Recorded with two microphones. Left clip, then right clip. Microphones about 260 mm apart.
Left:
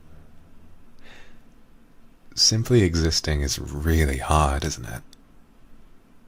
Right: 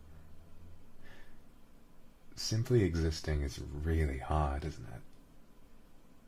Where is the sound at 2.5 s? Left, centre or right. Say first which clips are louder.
Left 11 dB; centre.